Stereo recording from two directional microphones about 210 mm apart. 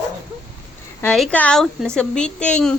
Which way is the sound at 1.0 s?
5° left (ahead or behind).